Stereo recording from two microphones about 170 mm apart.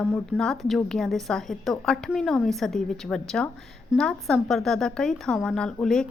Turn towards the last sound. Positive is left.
turn(degrees=5)  # may be behind; listen again after turning